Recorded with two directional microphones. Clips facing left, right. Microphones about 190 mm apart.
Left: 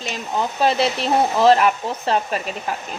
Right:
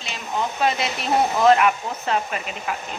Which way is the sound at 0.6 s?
30° left (ahead or behind).